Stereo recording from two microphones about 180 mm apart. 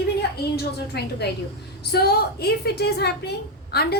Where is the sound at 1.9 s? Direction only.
60° left (ahead or behind).